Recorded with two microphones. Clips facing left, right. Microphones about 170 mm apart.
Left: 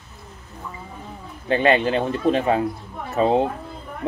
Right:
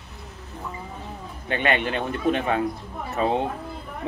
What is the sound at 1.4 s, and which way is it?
A man's voice, 30° left (ahead or behind).